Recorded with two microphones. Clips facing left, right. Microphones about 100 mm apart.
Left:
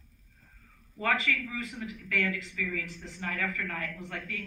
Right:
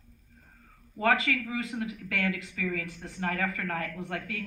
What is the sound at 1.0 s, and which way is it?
A woman's voice, 30° right (ahead or behind).